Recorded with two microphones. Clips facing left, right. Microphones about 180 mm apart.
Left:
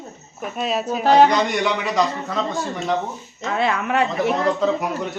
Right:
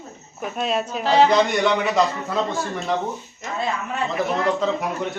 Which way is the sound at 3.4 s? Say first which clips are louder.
Left 5 dB; 75° left (ahead or behind).